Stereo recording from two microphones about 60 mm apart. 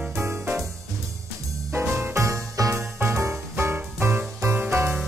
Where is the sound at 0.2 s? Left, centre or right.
Right.